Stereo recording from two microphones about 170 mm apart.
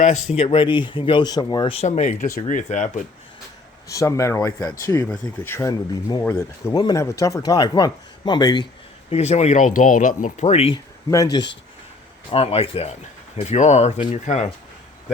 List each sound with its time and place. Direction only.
0.3 s speech: 35° left (ahead or behind)
3.8 s speech: 20° left (ahead or behind)
9.0 s speech: 40° left (ahead or behind)
11.1 s speech: 20° left (ahead or behind)
12.3 s speech: 35° left (ahead or behind)